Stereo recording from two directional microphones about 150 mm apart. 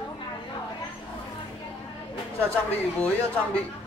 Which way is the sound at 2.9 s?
10° left (ahead or behind).